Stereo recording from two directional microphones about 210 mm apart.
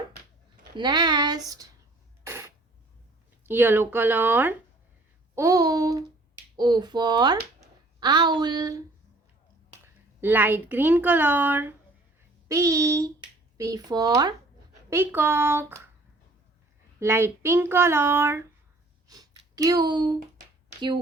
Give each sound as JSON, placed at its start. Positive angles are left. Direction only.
{"t": 0.8, "sound": "speech", "side_deg": -20}
{"t": 2.2, "sound": "cough", "side_deg": -15}
{"t": 3.4, "sound": "speech", "side_deg": -10}
{"t": 9.8, "sound": "a woman's voice", "side_deg": -10}
{"t": 17.0, "sound": "speech", "side_deg": -10}
{"t": 19.0, "sound": "a sound", "side_deg": -20}